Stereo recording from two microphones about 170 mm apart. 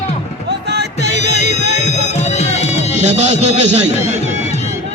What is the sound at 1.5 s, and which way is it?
Music, 40° left (ahead or behind).